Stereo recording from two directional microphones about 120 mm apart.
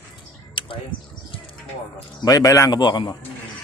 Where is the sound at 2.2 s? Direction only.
30° left (ahead or behind).